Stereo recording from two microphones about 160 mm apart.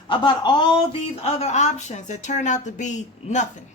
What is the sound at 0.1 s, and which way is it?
Speech, 30° left (ahead or behind).